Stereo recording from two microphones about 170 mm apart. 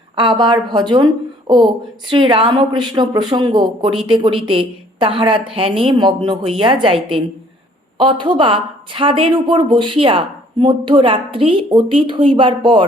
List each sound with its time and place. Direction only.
0.2 s a woman's voice: 30° right (ahead or behind)